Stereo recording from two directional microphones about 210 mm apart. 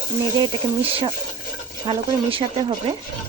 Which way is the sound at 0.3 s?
20° right (ahead or behind).